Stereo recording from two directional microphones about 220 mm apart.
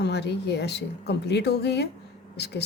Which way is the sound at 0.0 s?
50° left (ahead or behind).